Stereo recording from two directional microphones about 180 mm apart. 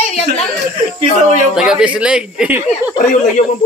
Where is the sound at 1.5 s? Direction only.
5° right (ahead or behind).